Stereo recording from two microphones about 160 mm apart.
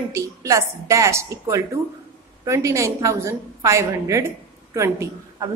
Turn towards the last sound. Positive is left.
turn(degrees=-15)  # may be behind; listen again after turning